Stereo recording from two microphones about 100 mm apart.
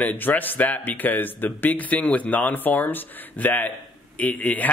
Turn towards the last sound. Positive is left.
turn(degrees=15)  # may be behind; listen again after turning